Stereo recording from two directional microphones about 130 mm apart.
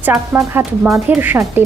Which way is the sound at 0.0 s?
15° right (ahead or behind).